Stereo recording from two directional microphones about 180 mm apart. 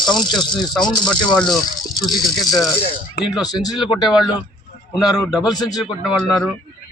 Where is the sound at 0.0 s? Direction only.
Centre (ahead or behind).